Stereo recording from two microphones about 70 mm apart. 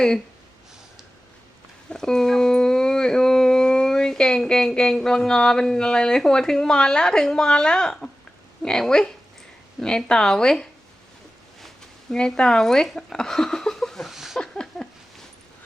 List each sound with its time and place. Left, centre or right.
1.9 s a woman's voice: centre
12.1 s speech: centre
14.3 s a sound: centre